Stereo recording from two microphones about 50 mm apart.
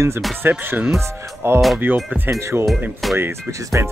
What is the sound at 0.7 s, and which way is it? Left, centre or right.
Speech, centre.